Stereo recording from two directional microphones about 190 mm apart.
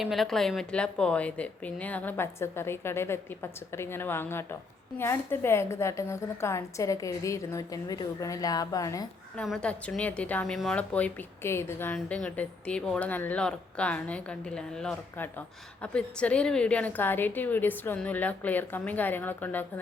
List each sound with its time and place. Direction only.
0.0 s a woman's voice: centre (ahead or behind); by 9.0 s 20° left (ahead or behind)
9.3 s a woman's voice: 5° left (ahead or behind)